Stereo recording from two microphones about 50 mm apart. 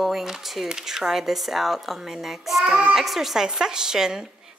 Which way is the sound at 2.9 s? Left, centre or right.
Centre.